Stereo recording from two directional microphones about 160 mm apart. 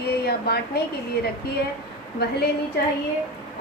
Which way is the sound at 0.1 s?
80° left.